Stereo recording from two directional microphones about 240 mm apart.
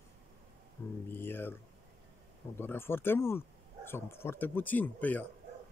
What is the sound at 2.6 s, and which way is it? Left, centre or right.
Speech, centre.